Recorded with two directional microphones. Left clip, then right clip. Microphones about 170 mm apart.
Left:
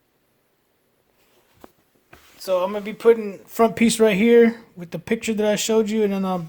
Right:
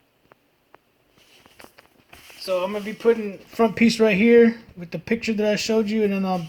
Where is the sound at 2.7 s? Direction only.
10° left (ahead or behind).